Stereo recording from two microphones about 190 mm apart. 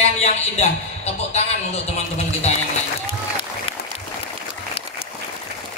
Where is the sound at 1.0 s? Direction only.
35° left (ahead or behind).